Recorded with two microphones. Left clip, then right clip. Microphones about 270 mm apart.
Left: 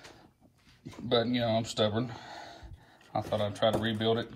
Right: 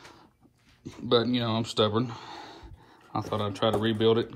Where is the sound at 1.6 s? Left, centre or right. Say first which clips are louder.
Right 4 dB; centre.